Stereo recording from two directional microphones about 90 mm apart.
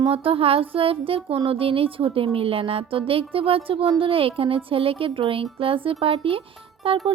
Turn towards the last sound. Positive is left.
turn(degrees=-80)